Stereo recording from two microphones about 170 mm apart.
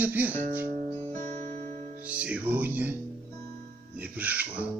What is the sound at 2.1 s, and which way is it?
Music, 10° right (ahead or behind).